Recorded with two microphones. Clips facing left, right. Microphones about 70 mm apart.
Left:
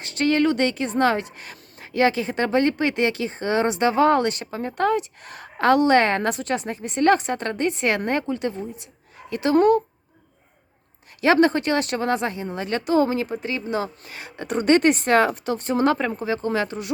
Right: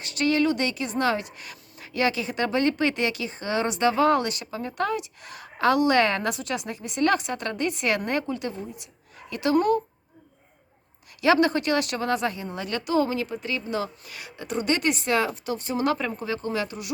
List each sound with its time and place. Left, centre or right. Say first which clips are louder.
0.0 s speech: left 3 dB; left
11.2 s speech: left 3 dB; left